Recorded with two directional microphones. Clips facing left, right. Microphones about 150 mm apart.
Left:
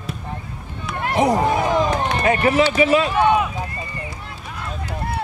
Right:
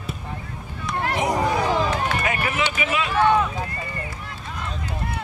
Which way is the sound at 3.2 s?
15° left (ahead or behind).